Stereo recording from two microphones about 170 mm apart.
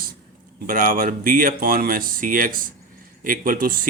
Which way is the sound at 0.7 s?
55° right (ahead or behind).